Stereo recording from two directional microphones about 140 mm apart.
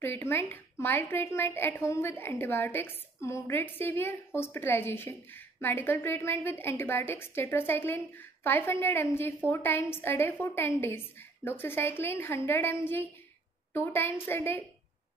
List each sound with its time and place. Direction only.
0.0 s a woman's voice: 15° left (ahead or behind)